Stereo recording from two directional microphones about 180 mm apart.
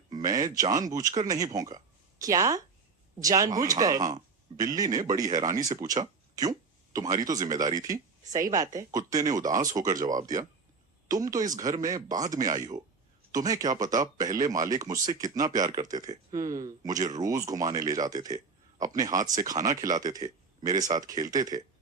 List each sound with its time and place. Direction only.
0.1 s speech: 20° right (ahead or behind)